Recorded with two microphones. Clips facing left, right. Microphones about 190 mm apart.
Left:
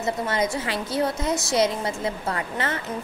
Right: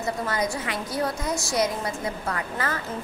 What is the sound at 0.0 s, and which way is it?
A woman's voice, 25° left (ahead or behind).